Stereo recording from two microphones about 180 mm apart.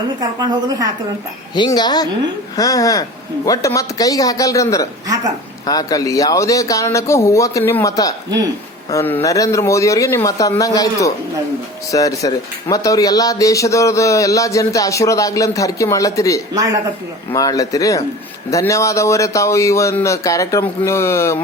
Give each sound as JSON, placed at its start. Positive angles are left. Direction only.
{"t": 0.2, "sound": "a woman's voice", "side_deg": -20}
{"t": 1.5, "sound": "speech", "side_deg": 25}